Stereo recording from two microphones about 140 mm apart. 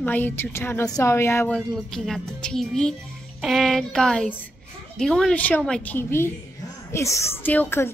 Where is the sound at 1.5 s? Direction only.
Centre (ahead or behind).